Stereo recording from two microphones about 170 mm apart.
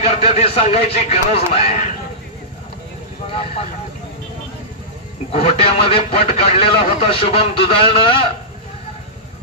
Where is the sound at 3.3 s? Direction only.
35° left (ahead or behind).